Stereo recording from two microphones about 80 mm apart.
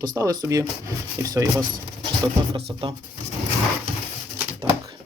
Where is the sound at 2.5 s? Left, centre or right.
Right.